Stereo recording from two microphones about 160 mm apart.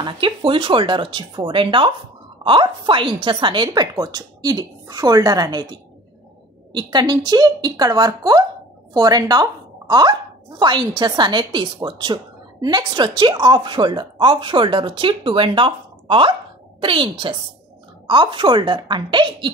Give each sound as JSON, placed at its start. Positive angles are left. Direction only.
{"t": 0.0, "sound": "a woman's voice", "side_deg": -35}